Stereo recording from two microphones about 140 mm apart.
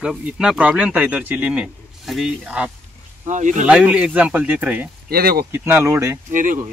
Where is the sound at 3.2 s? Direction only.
60° right (ahead or behind).